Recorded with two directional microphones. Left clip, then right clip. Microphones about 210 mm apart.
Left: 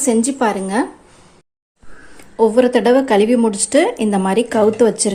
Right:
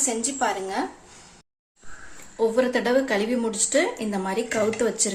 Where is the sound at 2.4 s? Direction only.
30° left (ahead or behind).